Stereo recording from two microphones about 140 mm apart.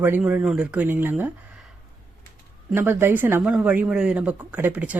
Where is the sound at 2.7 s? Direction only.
15° right (ahead or behind).